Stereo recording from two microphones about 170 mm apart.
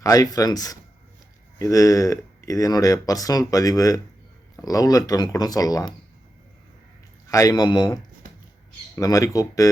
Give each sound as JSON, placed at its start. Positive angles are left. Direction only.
{"t": 0.0, "sound": "speech", "side_deg": 20}
{"t": 7.3, "sound": "speech", "side_deg": 20}